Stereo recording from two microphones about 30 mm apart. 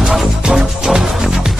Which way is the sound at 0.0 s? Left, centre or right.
Centre.